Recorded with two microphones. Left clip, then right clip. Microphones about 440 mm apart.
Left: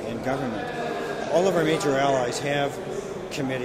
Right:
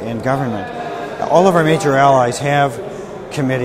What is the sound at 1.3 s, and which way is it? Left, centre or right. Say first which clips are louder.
Speech: right 10 dB; right.